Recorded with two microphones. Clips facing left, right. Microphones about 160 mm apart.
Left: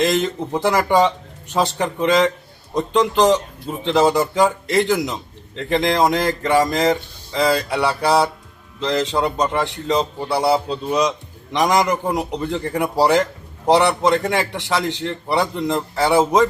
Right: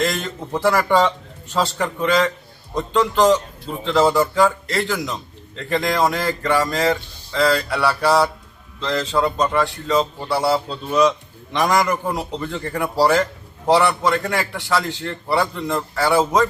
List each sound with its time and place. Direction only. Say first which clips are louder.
0.0 s a man's voice: left 4 dB; 20° left (ahead or behind)